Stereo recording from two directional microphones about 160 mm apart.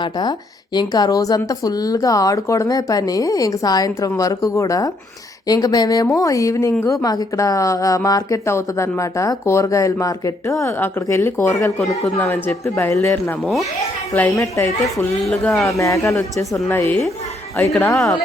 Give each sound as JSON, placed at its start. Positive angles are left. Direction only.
{"t": 0.0, "sound": "speech", "side_deg": 25}
{"t": 12.0, "sound": "speech", "side_deg": 10}
{"t": 13.4, "sound": "a child's voice", "side_deg": 0}
{"t": 14.1, "sound": "speech", "side_deg": 15}
{"t": 15.3, "sound": "speech", "side_deg": 5}
{"t": 15.8, "sound": "speech", "side_deg": 20}